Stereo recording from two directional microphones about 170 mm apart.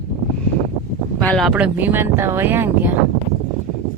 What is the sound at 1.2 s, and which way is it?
Speech, 5° left (ahead or behind).